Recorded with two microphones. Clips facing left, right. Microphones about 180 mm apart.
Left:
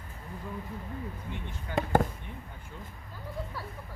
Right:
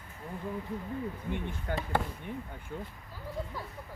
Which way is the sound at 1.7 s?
50° right (ahead or behind).